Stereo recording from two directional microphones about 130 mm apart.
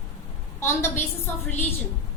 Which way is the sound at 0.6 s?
20° left (ahead or behind).